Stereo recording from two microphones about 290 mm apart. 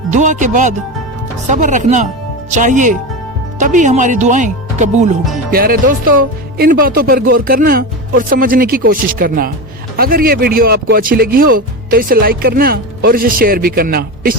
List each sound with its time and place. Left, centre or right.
0.1 s speech: right